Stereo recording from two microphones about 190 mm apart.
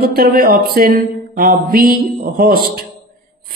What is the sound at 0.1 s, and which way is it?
A man's voice, 55° right (ahead or behind).